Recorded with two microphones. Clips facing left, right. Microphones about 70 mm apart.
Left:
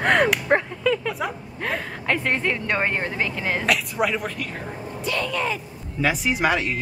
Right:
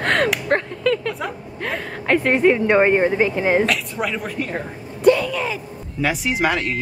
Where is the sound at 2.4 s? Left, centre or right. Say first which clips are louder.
Right 9 dB; centre.